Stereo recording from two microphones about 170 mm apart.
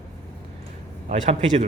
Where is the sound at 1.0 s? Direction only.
45° right (ahead or behind).